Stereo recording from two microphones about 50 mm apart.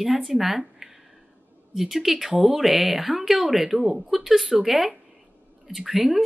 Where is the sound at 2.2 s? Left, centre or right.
Centre.